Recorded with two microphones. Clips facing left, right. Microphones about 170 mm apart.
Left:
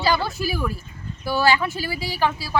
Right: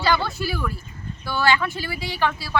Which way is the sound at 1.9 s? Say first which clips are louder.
Left 1 dB; 20° right (ahead or behind).